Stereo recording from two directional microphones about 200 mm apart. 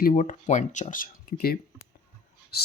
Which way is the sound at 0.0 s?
40° left (ahead or behind).